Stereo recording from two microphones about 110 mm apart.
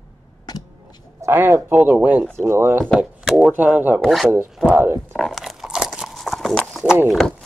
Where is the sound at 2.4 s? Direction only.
25° right (ahead or behind).